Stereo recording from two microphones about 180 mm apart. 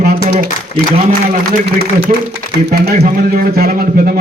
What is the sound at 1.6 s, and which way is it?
A man's voice, 65° right (ahead or behind).